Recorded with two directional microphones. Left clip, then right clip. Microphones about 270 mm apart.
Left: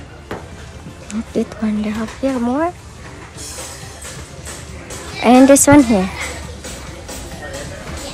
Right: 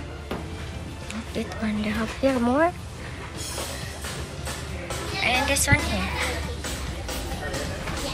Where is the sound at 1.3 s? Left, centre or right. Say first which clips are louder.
Left 9 dB; centre.